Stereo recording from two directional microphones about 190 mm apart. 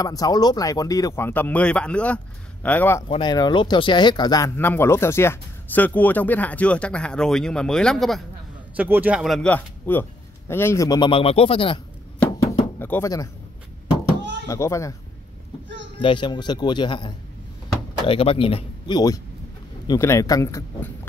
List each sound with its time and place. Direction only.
0.0 s speech: 20° left (ahead or behind)
3.1 s speech: 25° left (ahead or behind); by 8.2 s centre (ahead or behind)
8.7 s speech: 10° right (ahead or behind); by 11.8 s 30° left (ahead or behind)
12.7 s speech: 10° left (ahead or behind)
14.5 s speech: 15° left (ahead or behind)
16.0 s speech: 25° left (ahead or behind)